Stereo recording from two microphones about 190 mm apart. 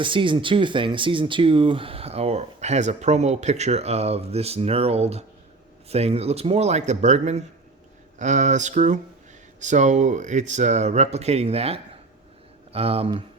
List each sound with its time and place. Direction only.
0.0 s speech: 25° right (ahead or behind)